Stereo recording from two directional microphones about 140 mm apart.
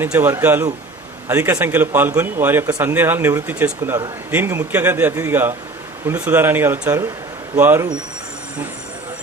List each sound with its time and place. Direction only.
0.0 s speech: 15° right (ahead or behind)